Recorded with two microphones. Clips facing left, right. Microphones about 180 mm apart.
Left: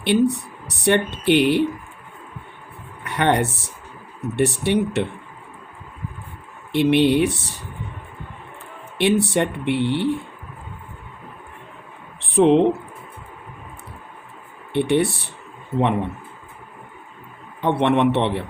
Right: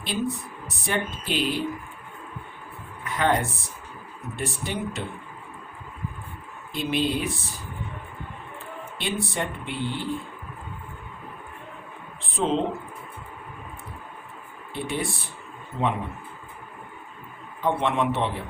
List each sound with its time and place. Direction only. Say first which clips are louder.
0.0 s speech: left 10 dB; 70° left (ahead or behind)
3.0 s speech: left 4 dB; 70° left (ahead or behind)
6.7 s speech: left 10 dB; 70° left (ahead or behind)
9.0 s speech: left 11 dB; 70° left (ahead or behind)
12.2 s speech: left 10 dB; 70° left (ahead or behind)
14.7 s speech: left 11 dB; 70° left (ahead or behind)
17.6 s speech: left 6 dB; 70° left (ahead or behind)